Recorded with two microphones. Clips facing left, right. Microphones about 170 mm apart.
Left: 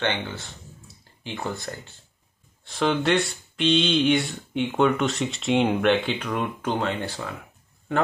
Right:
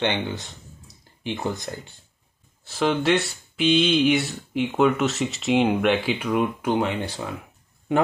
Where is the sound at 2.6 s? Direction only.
5° right (ahead or behind).